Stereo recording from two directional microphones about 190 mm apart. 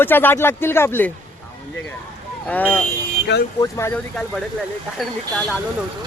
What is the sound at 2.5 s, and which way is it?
Speech, 10° left (ahead or behind).